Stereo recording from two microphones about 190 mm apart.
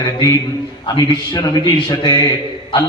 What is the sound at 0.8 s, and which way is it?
A man's voice, 20° left (ahead or behind).